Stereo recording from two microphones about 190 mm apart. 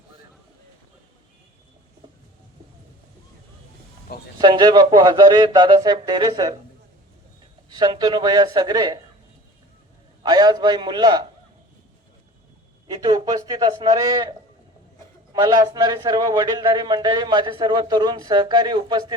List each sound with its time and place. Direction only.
4.4 s a man's voice: 25° right (ahead or behind)
7.7 s a man's voice: 20° right (ahead or behind)
10.2 s a man's voice: 20° right (ahead or behind)
12.9 s a man's voice: 20° right (ahead or behind)